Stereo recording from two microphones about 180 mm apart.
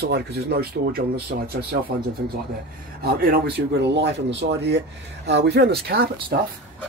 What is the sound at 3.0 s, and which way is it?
Speech, 60° right (ahead or behind).